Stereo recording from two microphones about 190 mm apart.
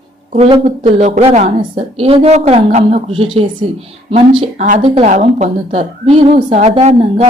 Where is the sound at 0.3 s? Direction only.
30° right (ahead or behind).